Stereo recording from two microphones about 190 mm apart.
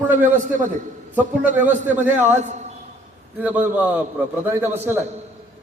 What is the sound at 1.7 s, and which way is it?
A man's voice, 40° right (ahead or behind).